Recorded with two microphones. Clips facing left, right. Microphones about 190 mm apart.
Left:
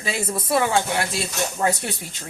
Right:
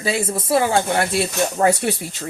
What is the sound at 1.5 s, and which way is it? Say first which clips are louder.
Speech: right 6 dB; 65° right (ahead or behind).